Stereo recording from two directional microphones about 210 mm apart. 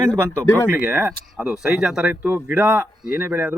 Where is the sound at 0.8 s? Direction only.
5° right (ahead or behind).